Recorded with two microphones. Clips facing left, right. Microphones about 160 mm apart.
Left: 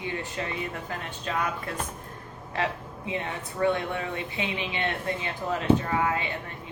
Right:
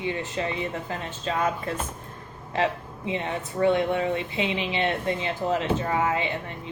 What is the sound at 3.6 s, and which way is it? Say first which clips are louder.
Speech: right 4 dB; 25° right (ahead or behind).